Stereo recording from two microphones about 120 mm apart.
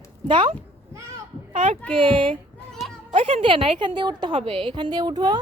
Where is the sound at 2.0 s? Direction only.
45° right (ahead or behind).